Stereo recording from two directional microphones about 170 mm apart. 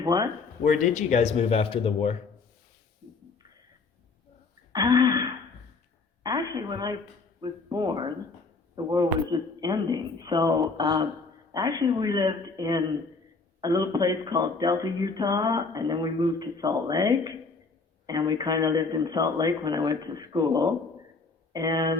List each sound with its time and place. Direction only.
0.0 s speech: 20° right (ahead or behind)
0.6 s speech: 50° left (ahead or behind)
4.7 s throat clearing: 25° right (ahead or behind)
6.2 s a sound: 20° right (ahead or behind)
7.4 s speech: 25° right (ahead or behind)